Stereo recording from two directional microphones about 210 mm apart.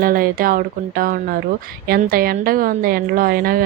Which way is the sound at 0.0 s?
40° right (ahead or behind).